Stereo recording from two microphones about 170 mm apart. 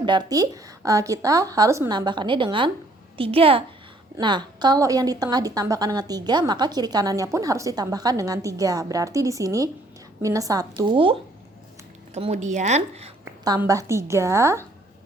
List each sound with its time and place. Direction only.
0.0 s a woman's voice: 25° right (ahead or behind)
12.1 s speech: 45° right (ahead or behind)
13.2 s a sound: 20° right (ahead or behind)
13.6 s a woman's voice: 20° right (ahead or behind)